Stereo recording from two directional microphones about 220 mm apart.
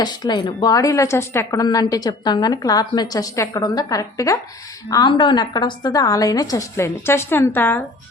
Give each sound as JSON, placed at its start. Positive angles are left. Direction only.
{"t": 0.0, "sound": "a woman's voice", "side_deg": 20}